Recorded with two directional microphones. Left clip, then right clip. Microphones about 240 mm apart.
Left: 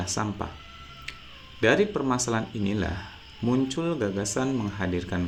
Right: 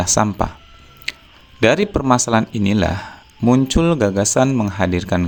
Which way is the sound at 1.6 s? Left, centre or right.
Right.